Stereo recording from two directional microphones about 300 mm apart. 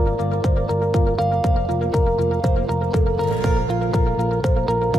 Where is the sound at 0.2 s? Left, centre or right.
Centre.